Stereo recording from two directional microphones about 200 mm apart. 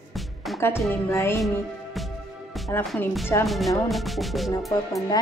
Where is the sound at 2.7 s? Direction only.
10° left (ahead or behind).